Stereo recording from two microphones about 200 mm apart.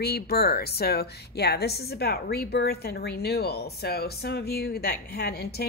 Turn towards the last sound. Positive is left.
turn(degrees=50)  # may be behind; listen again after turning